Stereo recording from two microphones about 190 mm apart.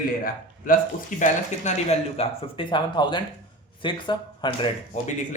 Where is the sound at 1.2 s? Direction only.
35° left (ahead or behind).